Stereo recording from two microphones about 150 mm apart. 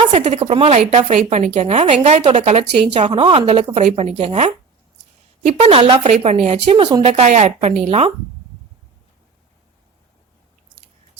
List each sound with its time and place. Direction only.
0.1 s a woman's voice: 50° right (ahead or behind)
5.5 s a woman's voice: 40° right (ahead or behind)